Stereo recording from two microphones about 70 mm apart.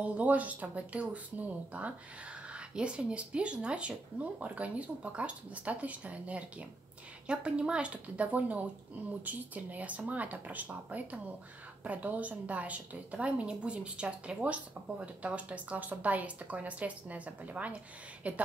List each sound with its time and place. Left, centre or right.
0.0 s a woman's voice: right
2.5 s a sound: centre
3.0 s a woman's voice: centre